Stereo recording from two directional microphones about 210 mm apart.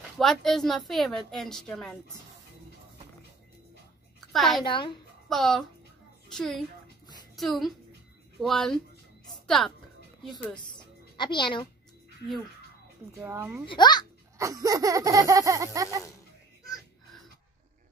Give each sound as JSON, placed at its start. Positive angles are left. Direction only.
{"t": 0.2, "sound": "a woman's voice", "side_deg": 0}
{"t": 4.3, "sound": "a woman's voice", "side_deg": 0}
{"t": 4.6, "sound": "a child's voice", "side_deg": 25}
{"t": 5.3, "sound": "a woman's voice", "side_deg": 0}
{"t": 11.1, "sound": "a child's voice", "side_deg": 20}
{"t": 13.2, "sound": "laughter", "side_deg": -10}
{"t": 13.7, "sound": "a child's voice", "side_deg": 20}
{"t": 14.4, "sound": "laughter", "side_deg": -15}